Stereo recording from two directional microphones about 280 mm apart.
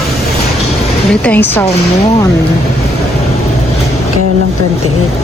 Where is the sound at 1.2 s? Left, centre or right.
Centre.